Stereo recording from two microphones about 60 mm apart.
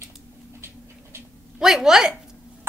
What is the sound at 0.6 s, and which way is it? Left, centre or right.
Dog, right.